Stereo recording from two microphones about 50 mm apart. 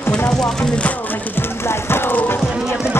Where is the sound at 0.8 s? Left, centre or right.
Left.